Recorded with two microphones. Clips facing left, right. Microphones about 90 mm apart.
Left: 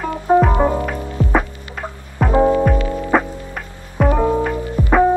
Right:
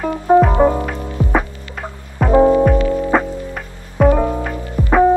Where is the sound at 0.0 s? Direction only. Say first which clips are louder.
Right 2 dB; centre (ahead or behind).